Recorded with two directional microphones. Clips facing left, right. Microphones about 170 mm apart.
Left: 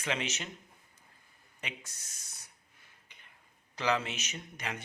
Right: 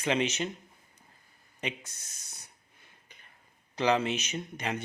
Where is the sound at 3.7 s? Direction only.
20° right (ahead or behind).